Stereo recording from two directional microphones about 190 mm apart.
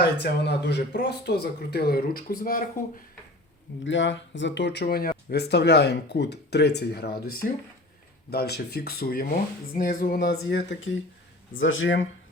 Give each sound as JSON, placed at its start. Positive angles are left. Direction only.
{"t": 0.0, "sound": "speech", "side_deg": 60}
{"t": 3.8, "sound": "speech", "side_deg": 75}
{"t": 9.7, "sound": "music", "side_deg": 50}
{"t": 10.3, "sound": "speech", "side_deg": 70}
{"t": 11.5, "sound": "speech", "side_deg": 90}